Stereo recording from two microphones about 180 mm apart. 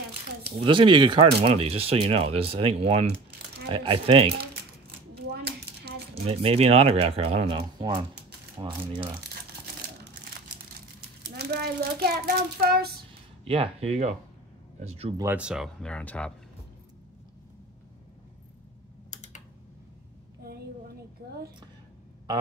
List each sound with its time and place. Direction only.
0.7 s speech: 25° right (ahead or behind)
5.1 s a sound: 65° right (ahead or behind)
6.2 s speech: 35° right (ahead or behind)
11.0 s a child's voice: 60° right (ahead or behind)
13.5 s speech: 35° right (ahead or behind)
15.1 s speech: 10° right (ahead or behind); by 16.3 s 5° left (ahead or behind)
19.0 s typing: 40° left (ahead or behind)